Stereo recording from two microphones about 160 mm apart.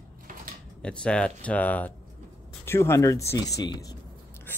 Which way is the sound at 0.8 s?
5° left (ahead or behind).